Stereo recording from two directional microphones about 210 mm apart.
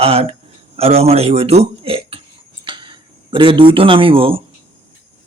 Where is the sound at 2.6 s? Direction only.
20° right (ahead or behind).